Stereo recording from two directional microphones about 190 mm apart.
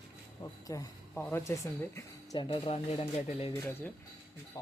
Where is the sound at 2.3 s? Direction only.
30° left (ahead or behind).